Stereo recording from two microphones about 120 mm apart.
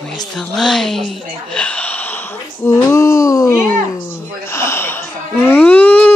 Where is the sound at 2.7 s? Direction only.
25° left (ahead or behind).